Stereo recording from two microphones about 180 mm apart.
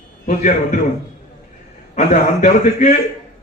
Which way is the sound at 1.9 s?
40° left (ahead or behind).